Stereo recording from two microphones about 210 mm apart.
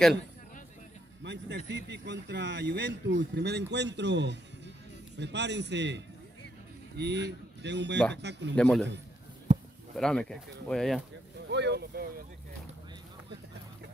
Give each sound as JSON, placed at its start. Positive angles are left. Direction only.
{"t": 1.2, "sound": "speech", "side_deg": -55}
{"t": 8.5, "sound": "speech", "side_deg": 5}
{"t": 9.9, "sound": "speech", "side_deg": 0}
{"t": 11.5, "sound": "speech", "side_deg": -55}